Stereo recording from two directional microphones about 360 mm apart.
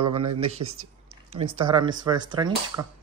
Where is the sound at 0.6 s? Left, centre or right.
Right.